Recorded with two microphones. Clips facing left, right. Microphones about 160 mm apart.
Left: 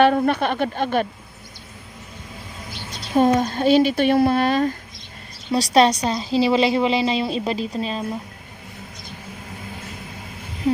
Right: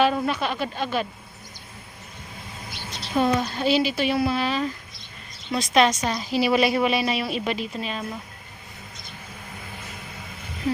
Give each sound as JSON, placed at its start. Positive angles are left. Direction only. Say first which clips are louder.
{"t": 0.0, "sound": "speech", "louder": "left 5 dB", "side_deg": 55}
{"t": 3.2, "sound": "a woman's voice", "louder": "left 5 dB", "side_deg": 45}
{"t": 5.5, "sound": "a woman's voice", "louder": "left 4 dB", "side_deg": 35}